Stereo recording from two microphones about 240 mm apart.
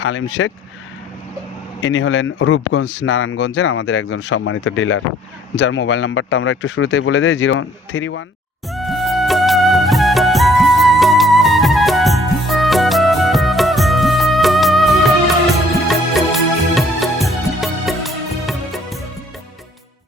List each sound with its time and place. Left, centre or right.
0.0 s speech: left
1.8 s speech: left
8.7 s music: centre